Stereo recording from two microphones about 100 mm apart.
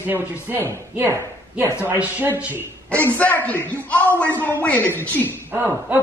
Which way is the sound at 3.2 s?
15° left (ahead or behind).